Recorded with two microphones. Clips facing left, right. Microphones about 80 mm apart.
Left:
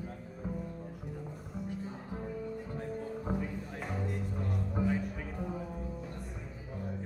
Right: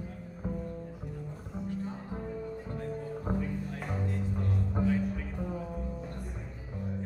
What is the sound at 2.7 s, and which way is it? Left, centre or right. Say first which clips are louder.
Music: right 1 dB; centre.